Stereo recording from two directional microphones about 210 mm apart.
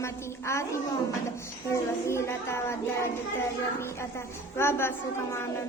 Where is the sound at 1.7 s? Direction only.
15° left (ahead or behind).